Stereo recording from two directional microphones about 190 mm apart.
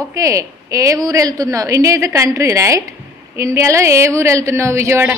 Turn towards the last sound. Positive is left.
turn(degrees=-15)  # may be behind; listen again after turning